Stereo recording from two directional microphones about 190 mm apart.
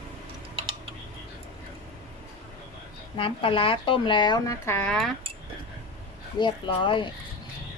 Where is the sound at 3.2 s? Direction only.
30° left (ahead or behind).